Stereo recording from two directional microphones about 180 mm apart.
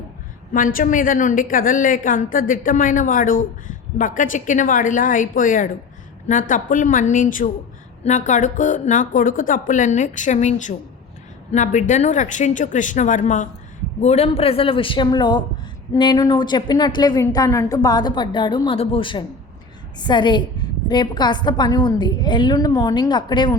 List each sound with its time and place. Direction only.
0.5 s a woman's voice: 50° left (ahead or behind); by 23.6 s 25° left (ahead or behind)